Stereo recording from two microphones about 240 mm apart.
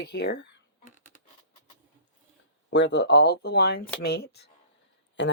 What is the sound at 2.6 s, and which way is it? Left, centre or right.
Speech, left.